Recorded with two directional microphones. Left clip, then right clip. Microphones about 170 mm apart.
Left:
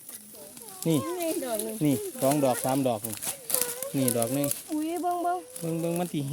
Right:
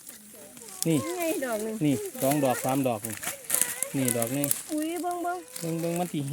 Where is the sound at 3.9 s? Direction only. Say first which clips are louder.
Left 2 dB; 10° left (ahead or behind).